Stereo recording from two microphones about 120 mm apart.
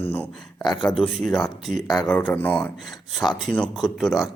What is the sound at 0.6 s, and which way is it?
Speech, 35° left (ahead or behind).